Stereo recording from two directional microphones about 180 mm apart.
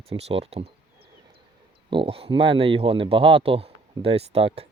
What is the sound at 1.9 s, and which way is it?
Speech, 30° right (ahead or behind).